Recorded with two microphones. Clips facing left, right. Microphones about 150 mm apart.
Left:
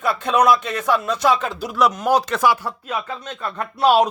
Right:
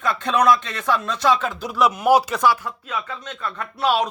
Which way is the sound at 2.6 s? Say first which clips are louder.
Left 3 dB; 35° left (ahead or behind).